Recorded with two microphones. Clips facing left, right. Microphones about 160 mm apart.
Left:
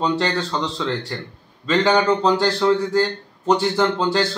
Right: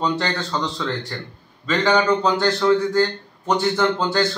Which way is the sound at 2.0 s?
30° left (ahead or behind).